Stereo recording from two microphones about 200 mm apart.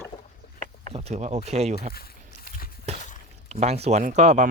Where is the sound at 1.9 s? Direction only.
50° left (ahead or behind).